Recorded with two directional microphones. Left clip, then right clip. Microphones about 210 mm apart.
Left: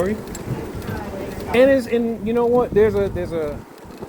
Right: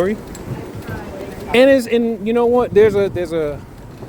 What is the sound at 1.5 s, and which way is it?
A man's voice, 70° right (ahead or behind).